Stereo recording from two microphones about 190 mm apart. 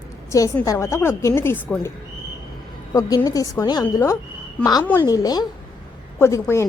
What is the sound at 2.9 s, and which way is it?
A woman's voice, 20° left (ahead or behind).